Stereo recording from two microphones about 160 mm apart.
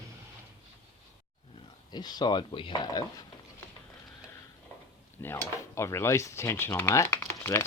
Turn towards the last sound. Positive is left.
turn(degrees=15)  # may be behind; listen again after turning